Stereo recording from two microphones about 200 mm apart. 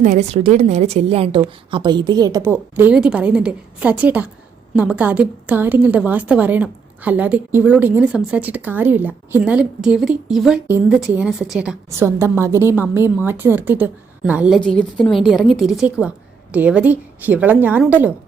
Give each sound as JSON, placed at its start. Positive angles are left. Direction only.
{"t": 0.0, "sound": "a woman's voice", "side_deg": -35}
{"t": 14.6, "sound": "a woman's voice", "side_deg": 5}